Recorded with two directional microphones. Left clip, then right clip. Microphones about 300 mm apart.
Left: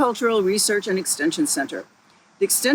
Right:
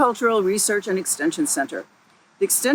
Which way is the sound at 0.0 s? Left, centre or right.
Centre.